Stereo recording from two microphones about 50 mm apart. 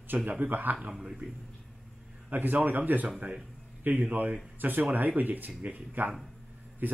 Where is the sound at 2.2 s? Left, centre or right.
Right.